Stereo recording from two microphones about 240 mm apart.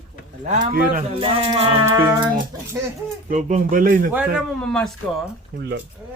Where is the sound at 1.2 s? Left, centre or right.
Right.